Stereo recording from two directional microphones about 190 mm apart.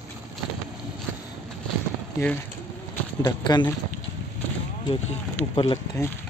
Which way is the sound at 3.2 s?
20° left (ahead or behind).